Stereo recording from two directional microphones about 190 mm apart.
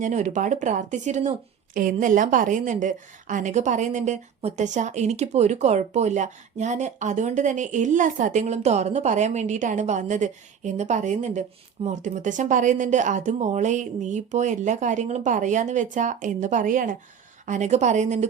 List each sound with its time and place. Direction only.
0.0 s a woman's voice: 40° right (ahead or behind)